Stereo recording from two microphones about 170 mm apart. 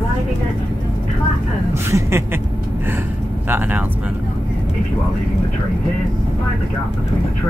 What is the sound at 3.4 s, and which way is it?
Speech, 10° right (ahead or behind).